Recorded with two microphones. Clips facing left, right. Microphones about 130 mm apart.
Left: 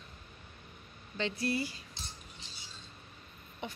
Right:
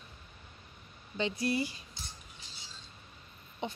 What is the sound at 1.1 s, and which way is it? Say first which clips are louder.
Speech: right 2 dB; 15° right (ahead or behind).